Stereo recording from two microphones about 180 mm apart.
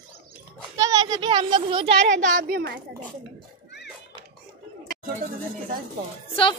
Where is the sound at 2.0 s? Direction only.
45° right (ahead or behind).